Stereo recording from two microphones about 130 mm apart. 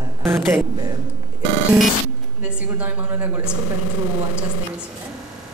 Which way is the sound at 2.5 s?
10° right (ahead or behind).